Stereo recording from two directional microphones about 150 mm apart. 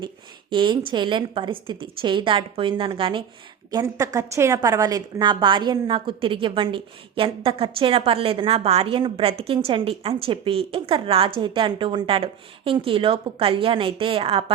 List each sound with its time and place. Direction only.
0.5 s a woman's voice: 35° right (ahead or behind)
3.7 s a woman's voice: 25° right (ahead or behind)